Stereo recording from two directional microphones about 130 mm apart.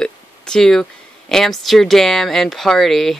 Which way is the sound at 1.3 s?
Centre (ahead or behind).